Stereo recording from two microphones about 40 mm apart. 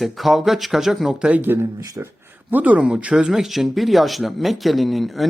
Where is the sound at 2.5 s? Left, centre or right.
Right.